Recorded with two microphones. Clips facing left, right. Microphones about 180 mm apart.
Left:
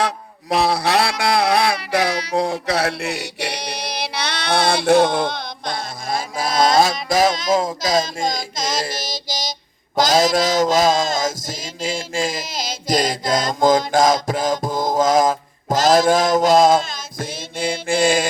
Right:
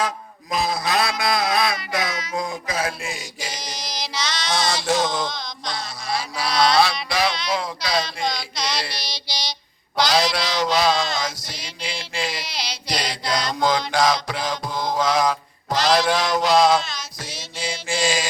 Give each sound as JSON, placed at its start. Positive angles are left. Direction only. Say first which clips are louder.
{"t": 0.5, "sound": "speech", "louder": "left 5 dB", "side_deg": 70}
{"t": 14.7, "sound": "mantra", "louder": "left 4 dB", "side_deg": 45}